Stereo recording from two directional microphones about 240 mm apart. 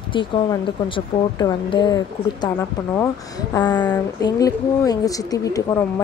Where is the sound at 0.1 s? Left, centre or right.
Left.